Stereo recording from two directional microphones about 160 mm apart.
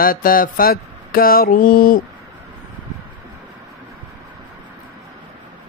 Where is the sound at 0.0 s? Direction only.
60° left (ahead or behind).